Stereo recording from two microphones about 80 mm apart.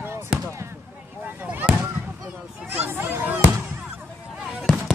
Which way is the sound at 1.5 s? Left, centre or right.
Right.